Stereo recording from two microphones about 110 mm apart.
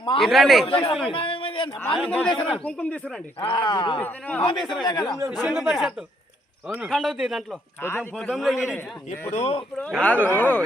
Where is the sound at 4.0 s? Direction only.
15° left (ahead or behind).